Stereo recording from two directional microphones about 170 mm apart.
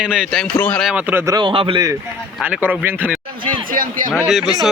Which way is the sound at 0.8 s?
10° right (ahead or behind).